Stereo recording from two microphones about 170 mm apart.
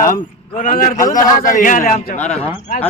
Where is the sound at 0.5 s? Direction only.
50° left (ahead or behind).